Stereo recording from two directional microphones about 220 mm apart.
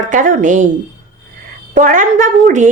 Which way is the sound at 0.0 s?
35° right (ahead or behind).